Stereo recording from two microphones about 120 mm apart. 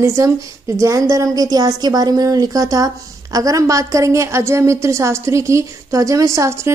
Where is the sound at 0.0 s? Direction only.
25° right (ahead or behind).